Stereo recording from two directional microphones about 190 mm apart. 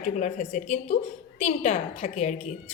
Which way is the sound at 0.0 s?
40° left (ahead or behind).